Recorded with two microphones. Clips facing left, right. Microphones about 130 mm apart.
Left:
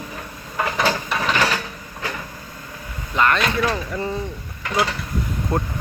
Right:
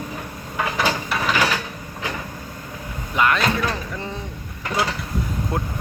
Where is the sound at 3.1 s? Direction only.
10° right (ahead or behind).